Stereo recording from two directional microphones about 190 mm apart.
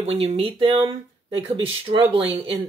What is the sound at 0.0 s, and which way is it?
Speech, 30° right (ahead or behind).